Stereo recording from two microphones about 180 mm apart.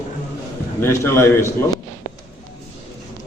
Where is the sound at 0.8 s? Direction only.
15° left (ahead or behind).